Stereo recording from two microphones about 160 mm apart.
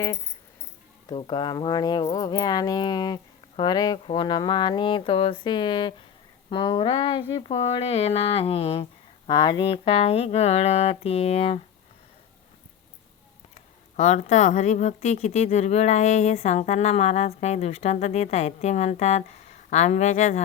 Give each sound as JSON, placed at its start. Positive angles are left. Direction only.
{"t": 1.1, "sound": "speech", "side_deg": 30}
{"t": 13.5, "sound": "a woman's voice", "side_deg": 45}